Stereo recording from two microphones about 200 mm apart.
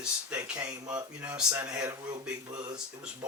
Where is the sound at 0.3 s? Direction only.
5° right (ahead or behind).